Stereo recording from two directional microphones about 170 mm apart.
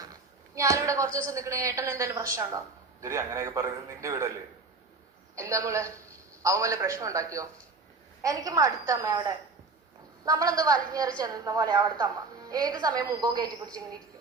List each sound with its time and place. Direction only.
0.5 s a man's voice: 20° right (ahead or behind)
5.4 s a man's voice: 15° right (ahead or behind)